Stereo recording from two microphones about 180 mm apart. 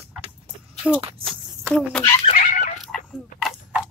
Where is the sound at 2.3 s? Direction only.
40° left (ahead or behind).